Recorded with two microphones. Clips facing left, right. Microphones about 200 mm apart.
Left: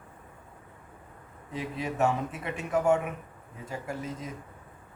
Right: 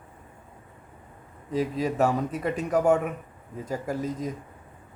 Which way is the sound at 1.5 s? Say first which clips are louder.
Right 6 dB; 40° right (ahead or behind).